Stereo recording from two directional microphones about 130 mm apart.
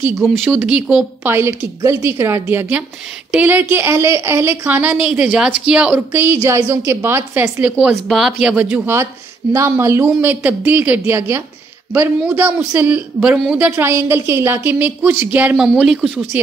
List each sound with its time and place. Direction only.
0.4 s a woman's voice: 5° right (ahead or behind)
1.3 s a woman's voice: 20° right (ahead or behind)
7.8 s a woman's voice: centre (ahead or behind)